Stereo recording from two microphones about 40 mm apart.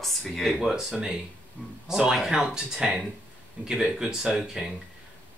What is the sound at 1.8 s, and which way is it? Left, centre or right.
Speech, centre.